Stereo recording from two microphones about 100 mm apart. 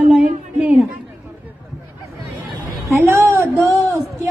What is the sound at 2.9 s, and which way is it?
Speech, 25° right (ahead or behind).